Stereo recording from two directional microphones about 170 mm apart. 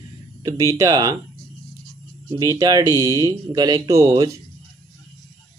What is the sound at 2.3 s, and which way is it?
Speech, 20° right (ahead or behind).